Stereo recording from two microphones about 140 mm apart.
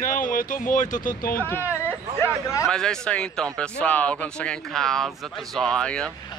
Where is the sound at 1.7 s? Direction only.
20° left (ahead or behind).